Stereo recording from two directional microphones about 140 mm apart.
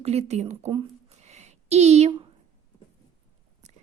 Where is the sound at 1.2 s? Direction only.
55° right (ahead or behind).